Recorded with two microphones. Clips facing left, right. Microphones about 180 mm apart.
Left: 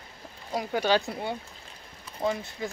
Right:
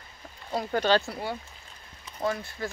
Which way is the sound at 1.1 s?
20° left (ahead or behind).